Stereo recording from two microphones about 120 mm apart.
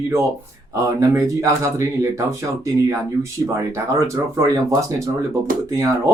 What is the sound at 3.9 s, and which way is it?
Speech, 25° right (ahead or behind).